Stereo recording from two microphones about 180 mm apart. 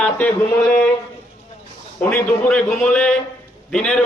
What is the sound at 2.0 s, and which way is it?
A man's voice, 5° left (ahead or behind).